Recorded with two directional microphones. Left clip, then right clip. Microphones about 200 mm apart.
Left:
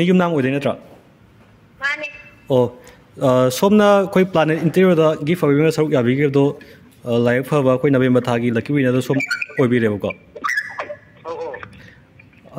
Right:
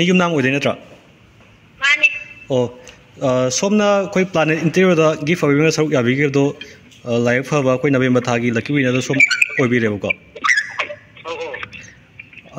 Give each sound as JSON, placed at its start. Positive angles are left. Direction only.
{"t": 0.0, "sound": "a man's voice", "side_deg": 5}
{"t": 1.8, "sound": "a sound", "side_deg": 15}
{"t": 3.2, "sound": "a man's voice", "side_deg": 20}